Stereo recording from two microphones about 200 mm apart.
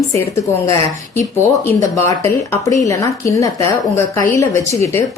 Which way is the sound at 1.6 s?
15° left (ahead or behind).